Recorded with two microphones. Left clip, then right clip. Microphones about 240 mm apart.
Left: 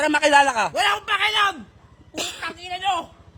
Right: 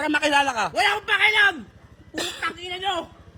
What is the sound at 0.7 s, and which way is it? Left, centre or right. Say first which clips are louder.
A man's voice: even; left.